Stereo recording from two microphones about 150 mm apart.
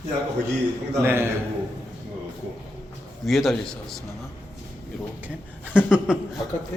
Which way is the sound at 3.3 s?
Centre (ahead or behind).